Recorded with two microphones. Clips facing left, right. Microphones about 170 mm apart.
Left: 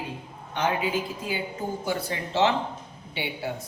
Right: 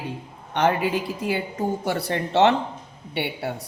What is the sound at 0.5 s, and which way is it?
A woman's voice, 65° right (ahead or behind).